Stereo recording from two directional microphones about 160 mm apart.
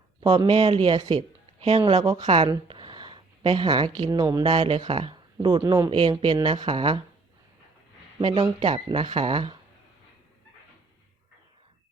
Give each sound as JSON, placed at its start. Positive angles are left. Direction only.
{"t": 0.3, "sound": "speech", "side_deg": -35}
{"t": 2.0, "sound": "speech", "side_deg": -20}
{"t": 4.5, "sound": "speech", "side_deg": -35}
{"t": 8.2, "sound": "speech", "side_deg": -30}